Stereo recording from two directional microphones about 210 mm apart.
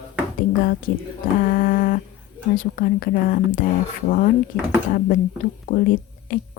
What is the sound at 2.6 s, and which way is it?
Speech, 40° left (ahead or behind).